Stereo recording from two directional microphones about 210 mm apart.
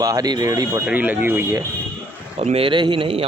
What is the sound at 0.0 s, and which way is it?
Speech, 15° right (ahead or behind).